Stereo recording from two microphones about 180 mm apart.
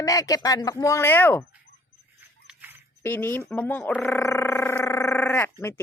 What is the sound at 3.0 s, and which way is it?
Speech, 10° left (ahead or behind).